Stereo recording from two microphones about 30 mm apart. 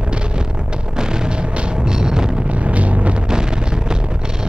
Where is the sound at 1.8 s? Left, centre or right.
Right.